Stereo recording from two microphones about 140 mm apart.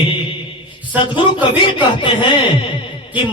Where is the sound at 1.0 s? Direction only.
35° left (ahead or behind).